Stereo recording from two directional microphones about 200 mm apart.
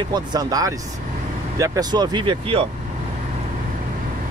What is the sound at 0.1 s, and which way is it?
Speech, 20° right (ahead or behind).